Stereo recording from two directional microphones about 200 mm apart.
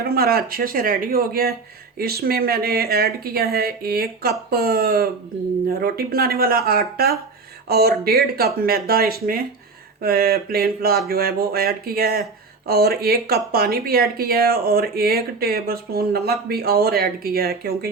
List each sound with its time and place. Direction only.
0.0 s speech: 50° right (ahead or behind)